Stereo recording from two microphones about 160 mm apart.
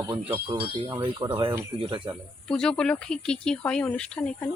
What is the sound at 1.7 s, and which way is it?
Speech, 35° right (ahead or behind).